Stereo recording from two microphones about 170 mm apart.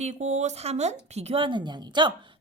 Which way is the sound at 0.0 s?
45° right (ahead or behind).